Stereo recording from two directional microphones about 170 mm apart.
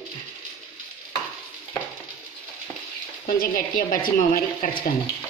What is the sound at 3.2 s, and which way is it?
A woman's voice, 55° left (ahead or behind).